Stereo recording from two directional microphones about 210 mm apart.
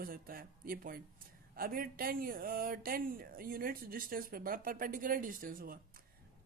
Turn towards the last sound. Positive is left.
turn(degrees=-40)  # may be behind; listen again after turning